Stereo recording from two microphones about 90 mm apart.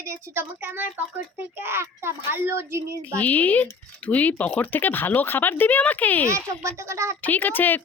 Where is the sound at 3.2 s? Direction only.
15° left (ahead or behind).